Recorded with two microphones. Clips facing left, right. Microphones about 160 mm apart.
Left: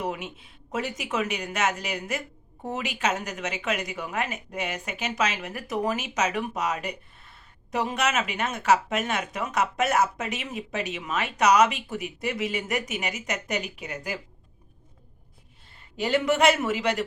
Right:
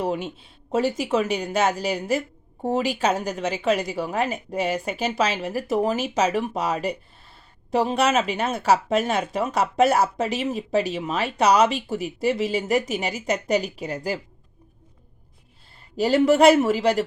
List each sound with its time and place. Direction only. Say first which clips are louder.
0.0 s speech: right 6 dB; 30° right (ahead or behind)
16.0 s speech: right 6 dB; 35° right (ahead or behind)